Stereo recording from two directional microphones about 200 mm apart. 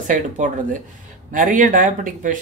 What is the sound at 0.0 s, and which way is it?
Speech, 40° right (ahead or behind).